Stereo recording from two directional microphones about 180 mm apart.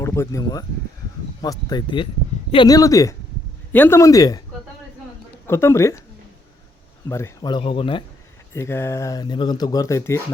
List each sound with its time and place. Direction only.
0.0 s speech: 15° left (ahead or behind)
5.5 s speech: 15° left (ahead or behind)
7.1 s speech: 15° left (ahead or behind)
7.5 s speech: 30° left (ahead or behind)
8.5 s speech: 15° left (ahead or behind)